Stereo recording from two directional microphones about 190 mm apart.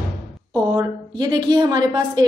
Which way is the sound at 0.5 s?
20° right (ahead or behind).